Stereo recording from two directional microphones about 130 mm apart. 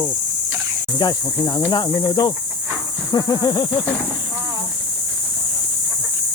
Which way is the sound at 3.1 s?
25° left (ahead or behind).